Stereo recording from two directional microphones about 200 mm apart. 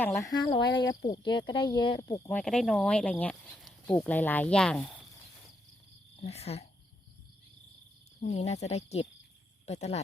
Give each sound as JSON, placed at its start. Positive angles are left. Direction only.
{"t": 0.0, "sound": "speech", "side_deg": 10}
{"t": 2.4, "sound": "speech", "side_deg": 5}
{"t": 6.2, "sound": "speech", "side_deg": 30}
{"t": 8.2, "sound": "speech", "side_deg": 35}